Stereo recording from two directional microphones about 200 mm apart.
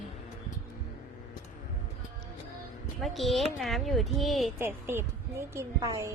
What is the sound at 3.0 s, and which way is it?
Speech, centre (ahead or behind).